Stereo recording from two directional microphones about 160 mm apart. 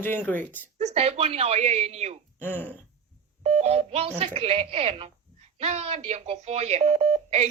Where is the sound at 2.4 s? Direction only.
10° left (ahead or behind).